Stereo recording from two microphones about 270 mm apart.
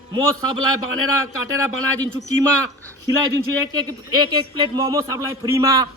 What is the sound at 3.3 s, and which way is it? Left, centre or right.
A man's voice, centre.